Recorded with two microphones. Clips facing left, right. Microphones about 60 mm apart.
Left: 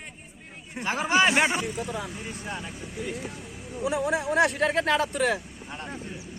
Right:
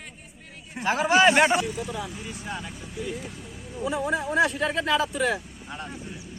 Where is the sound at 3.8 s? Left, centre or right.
Left.